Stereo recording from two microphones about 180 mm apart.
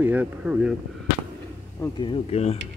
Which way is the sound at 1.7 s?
25° left (ahead or behind).